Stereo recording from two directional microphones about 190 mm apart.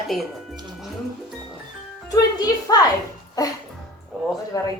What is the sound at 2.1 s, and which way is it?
A woman's voice, 20° left (ahead or behind).